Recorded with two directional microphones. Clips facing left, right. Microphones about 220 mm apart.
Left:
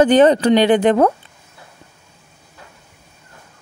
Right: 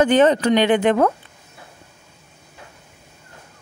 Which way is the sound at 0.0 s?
35° left (ahead or behind).